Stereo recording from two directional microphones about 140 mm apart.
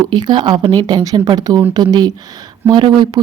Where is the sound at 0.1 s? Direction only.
30° right (ahead or behind).